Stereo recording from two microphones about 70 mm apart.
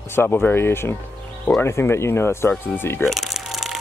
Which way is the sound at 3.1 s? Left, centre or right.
Centre.